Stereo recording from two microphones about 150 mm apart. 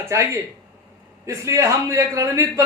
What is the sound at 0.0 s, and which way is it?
A man's voice, 20° right (ahead or behind).